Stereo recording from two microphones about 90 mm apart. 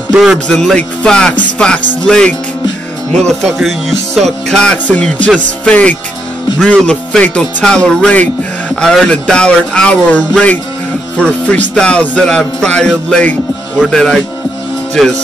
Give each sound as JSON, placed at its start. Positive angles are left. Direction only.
{"t": 0.5, "sound": "music", "side_deg": 5}
{"t": 15.0, "sound": "speech", "side_deg": 5}